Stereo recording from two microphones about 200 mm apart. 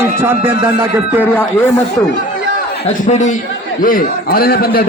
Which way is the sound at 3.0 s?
35° left (ahead or behind).